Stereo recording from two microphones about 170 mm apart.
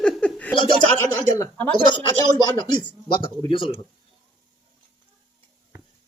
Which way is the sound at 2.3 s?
25° left (ahead or behind).